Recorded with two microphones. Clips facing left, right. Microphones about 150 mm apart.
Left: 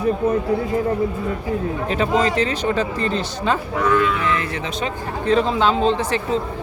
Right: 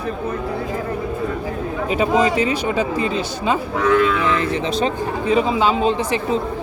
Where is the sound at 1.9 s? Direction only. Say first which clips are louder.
Right 2 dB; 10° right (ahead or behind).